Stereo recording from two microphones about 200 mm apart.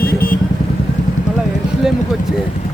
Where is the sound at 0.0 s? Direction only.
50° left (ahead or behind).